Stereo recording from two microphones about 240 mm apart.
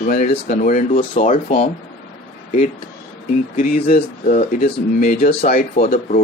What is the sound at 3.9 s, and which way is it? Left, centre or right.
Speech, left.